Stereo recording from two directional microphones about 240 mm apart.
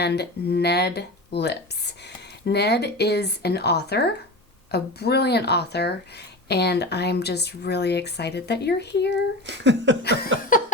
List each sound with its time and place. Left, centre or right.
0.0 s speech: left
9.5 s speech: right
10.0 s speech: left